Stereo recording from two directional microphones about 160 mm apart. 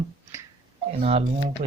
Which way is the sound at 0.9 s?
40° right (ahead or behind).